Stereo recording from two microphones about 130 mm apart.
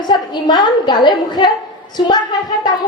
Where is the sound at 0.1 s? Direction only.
35° left (ahead or behind).